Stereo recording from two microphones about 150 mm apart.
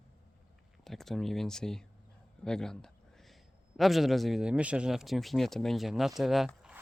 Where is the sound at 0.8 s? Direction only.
Centre (ahead or behind).